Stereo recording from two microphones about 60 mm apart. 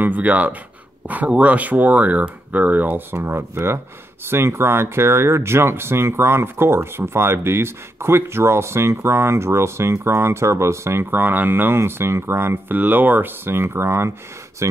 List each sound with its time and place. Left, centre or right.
0.0 s speech: right
3.2 s speech: right
12.7 s speech: right
14.6 s speech: right